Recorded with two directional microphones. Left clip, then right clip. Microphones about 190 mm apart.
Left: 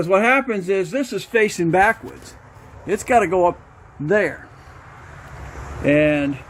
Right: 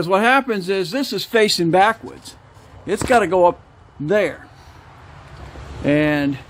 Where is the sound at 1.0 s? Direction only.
30° right (ahead or behind).